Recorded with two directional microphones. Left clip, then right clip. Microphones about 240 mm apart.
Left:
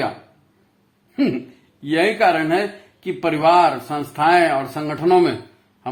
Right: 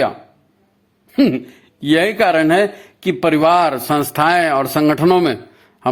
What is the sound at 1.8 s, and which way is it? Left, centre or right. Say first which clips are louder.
Speech: right 2 dB; right.